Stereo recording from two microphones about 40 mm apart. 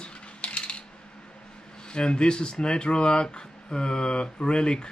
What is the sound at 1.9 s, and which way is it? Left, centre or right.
Speech, left.